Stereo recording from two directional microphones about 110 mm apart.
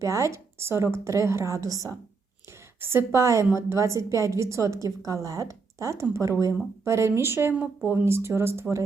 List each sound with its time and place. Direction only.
0.0 s a woman's voice: 30° right (ahead or behind)